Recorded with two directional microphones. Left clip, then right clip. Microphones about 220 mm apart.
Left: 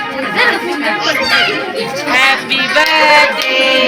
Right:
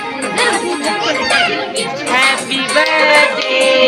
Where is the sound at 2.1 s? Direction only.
45° right (ahead or behind).